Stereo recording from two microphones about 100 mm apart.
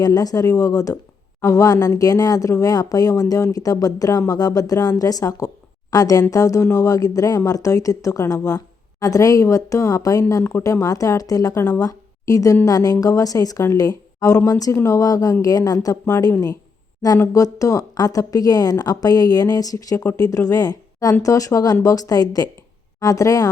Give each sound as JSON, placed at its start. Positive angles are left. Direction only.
{"t": 0.0, "sound": "speech", "side_deg": 40}